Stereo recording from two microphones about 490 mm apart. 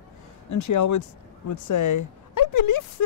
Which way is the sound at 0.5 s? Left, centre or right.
Left.